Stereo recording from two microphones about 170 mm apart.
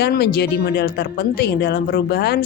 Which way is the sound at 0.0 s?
70° left (ahead or behind).